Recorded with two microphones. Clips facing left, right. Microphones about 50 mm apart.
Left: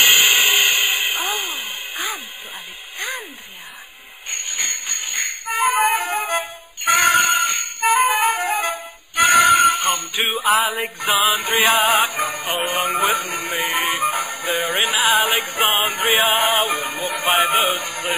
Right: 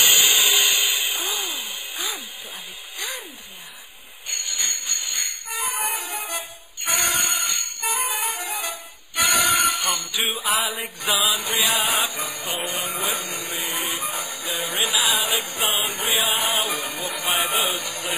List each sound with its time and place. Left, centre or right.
0.0 s music: left
3.0 s a sound: left
4.3 s music: left